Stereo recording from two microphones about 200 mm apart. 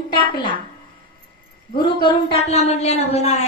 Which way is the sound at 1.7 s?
25° left (ahead or behind).